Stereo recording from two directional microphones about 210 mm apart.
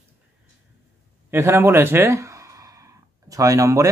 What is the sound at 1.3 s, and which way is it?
Speech, 10° right (ahead or behind).